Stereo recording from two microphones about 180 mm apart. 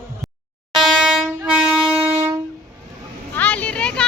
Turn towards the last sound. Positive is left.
turn(degrees=5)  # may be behind; listen again after turning